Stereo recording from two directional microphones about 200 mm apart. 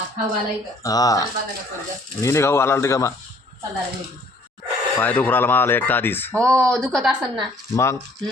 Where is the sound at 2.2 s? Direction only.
15° left (ahead or behind).